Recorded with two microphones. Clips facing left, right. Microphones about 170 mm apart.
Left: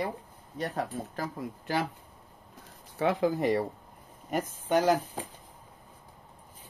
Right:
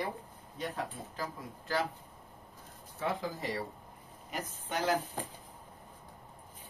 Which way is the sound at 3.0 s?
70° left (ahead or behind).